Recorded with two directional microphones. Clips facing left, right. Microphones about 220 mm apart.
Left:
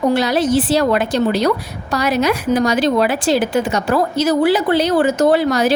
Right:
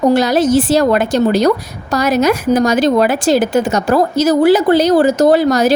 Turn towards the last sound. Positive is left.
turn(degrees=-40)  # may be behind; listen again after turning